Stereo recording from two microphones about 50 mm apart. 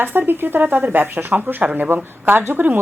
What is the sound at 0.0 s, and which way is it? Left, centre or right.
A woman's voice, right.